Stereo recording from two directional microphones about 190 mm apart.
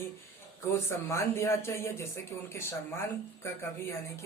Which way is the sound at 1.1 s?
15° left (ahead or behind).